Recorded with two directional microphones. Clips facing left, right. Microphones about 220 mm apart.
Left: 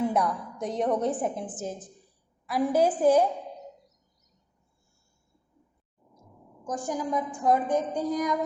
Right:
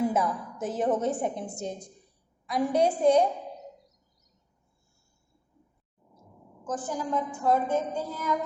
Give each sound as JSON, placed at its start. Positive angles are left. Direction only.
{"t": 0.0, "sound": "a woman's voice", "side_deg": 0}
{"t": 6.7, "sound": "a woman's voice", "side_deg": 15}